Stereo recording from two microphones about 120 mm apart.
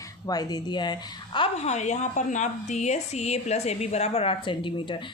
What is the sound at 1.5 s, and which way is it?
A woman's voice, 70° left (ahead or behind).